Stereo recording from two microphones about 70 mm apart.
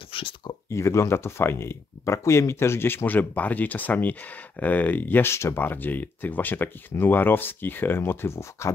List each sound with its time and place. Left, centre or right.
0.7 s speech: left
5.3 s speech: left
5.6 s speech: left